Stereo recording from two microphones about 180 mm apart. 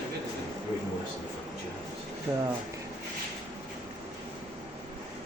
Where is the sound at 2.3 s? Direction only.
20° right (ahead or behind).